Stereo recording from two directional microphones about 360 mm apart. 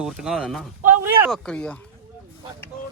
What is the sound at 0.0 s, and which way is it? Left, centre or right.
Speech, centre.